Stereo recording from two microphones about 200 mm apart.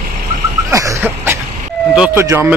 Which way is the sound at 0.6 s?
15° right (ahead or behind).